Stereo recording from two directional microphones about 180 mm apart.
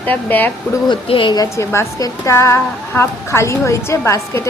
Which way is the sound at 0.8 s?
30° left (ahead or behind).